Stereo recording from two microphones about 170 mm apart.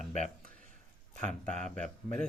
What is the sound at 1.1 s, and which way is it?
Speech, 45° right (ahead or behind).